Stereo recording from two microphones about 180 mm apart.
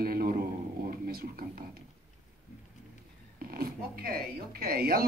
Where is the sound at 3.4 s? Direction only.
55° right (ahead or behind).